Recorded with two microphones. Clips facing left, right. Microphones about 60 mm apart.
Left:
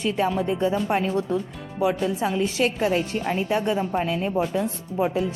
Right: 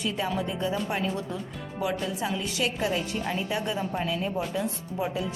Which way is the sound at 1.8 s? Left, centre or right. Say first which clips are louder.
Left 6 dB; left.